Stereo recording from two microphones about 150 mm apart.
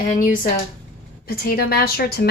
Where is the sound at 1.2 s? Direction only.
85° left.